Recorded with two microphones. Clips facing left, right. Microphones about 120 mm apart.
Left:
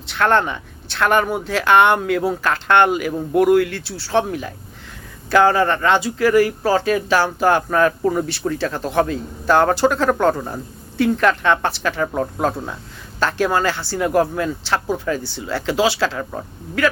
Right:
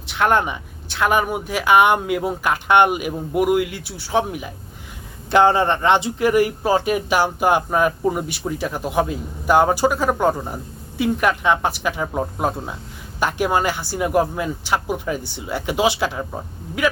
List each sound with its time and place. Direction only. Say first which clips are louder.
0.1 s speech: left 1 dB; 15° right (ahead or behind)